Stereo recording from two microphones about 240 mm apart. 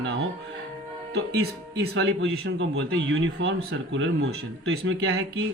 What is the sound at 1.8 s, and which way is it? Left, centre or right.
A man's voice, right.